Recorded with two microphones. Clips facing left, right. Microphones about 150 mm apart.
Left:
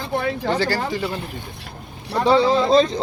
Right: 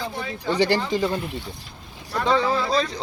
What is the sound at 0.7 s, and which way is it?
Speech, 45° left (ahead or behind).